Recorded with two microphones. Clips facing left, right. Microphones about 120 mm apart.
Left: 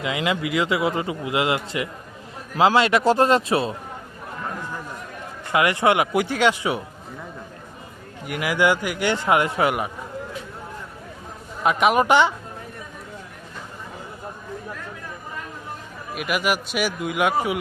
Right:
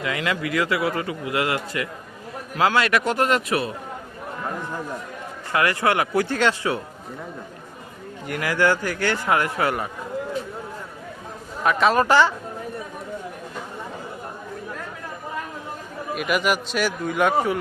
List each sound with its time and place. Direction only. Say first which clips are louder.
0.0 s a man's voice: left 1 dB; 20° left (ahead or behind)
5.5 s a man's voice: left 2 dB; 20° left (ahead or behind)
8.3 s a man's voice: left 1 dB; 10° left (ahead or behind)
11.6 s a man's voice: even; 20° left (ahead or behind)
16.1 s a man's voice: right 1 dB; 5° left (ahead or behind)